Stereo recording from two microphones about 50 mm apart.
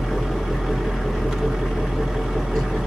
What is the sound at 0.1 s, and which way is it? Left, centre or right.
Vehicle, centre.